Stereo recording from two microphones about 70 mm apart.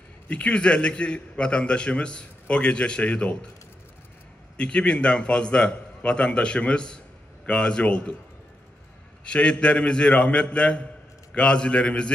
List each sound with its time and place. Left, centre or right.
0.3 s a man's voice: centre
4.6 s a man's voice: centre
9.2 s a man's voice: centre